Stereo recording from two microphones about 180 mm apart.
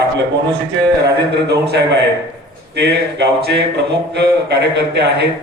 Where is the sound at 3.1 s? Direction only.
70° right (ahead or behind).